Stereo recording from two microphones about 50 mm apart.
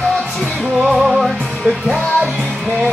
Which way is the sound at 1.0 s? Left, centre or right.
Centre.